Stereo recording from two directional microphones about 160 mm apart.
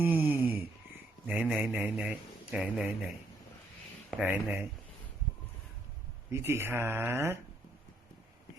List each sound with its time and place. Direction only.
0.0 s a sound: 10° right (ahead or behind)
1.3 s a man's voice: 5° right (ahead or behind)
4.2 s speech: 10° right (ahead or behind)
6.3 s speech: 15° right (ahead or behind)